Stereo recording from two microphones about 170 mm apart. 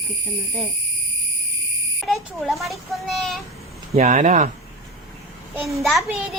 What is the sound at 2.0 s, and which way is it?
A child's voice, centre (ahead or behind).